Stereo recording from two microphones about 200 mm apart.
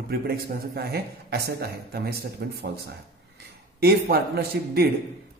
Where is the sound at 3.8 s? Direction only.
50° right (ahead or behind).